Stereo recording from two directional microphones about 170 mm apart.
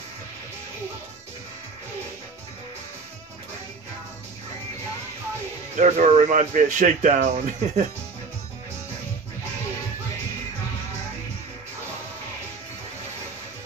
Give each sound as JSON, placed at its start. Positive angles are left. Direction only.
{"t": 5.8, "sound": "speech", "side_deg": -45}